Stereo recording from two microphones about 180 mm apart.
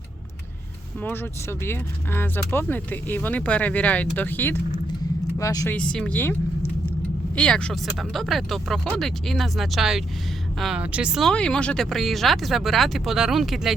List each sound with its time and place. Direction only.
1.0 s speech: 10° left (ahead or behind)
5.7 s speech: 5° left (ahead or behind)
7.3 s speech: 5° left (ahead or behind)